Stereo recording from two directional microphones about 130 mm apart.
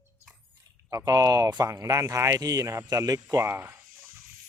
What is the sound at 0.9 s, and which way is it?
Speech, 30° right (ahead or behind).